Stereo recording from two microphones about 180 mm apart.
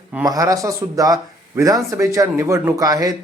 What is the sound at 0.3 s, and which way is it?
A man's voice, 20° right (ahead or behind).